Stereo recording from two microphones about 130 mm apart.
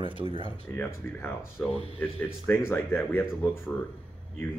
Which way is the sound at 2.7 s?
15° left (ahead or behind).